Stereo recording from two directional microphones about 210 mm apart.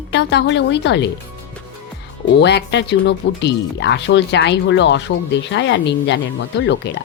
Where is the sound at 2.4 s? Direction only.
55° left (ahead or behind).